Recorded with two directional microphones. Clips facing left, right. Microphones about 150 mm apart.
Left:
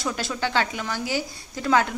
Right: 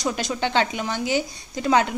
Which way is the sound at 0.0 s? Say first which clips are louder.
Right 2 dB; 20° right (ahead or behind).